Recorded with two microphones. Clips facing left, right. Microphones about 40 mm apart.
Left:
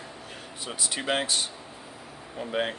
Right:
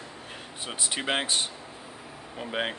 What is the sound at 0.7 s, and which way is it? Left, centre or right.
Speech, right.